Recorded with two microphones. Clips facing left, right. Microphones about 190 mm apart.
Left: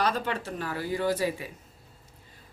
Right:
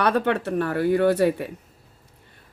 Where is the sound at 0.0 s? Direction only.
60° right (ahead or behind).